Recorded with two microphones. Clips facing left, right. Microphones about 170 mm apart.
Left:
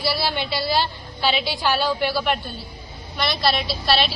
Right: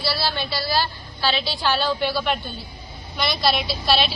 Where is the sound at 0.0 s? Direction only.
15° left (ahead or behind).